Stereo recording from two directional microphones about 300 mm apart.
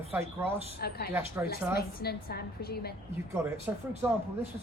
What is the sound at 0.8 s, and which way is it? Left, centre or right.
A woman's voice, left.